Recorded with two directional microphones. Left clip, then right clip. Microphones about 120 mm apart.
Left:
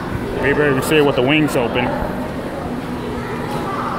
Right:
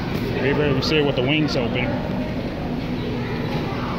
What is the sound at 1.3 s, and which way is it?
Speech, 70° left (ahead or behind).